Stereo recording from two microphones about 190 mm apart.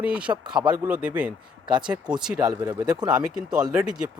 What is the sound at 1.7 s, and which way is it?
Speech, 25° right (ahead or behind).